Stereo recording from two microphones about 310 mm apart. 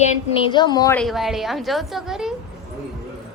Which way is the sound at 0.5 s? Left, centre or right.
Centre.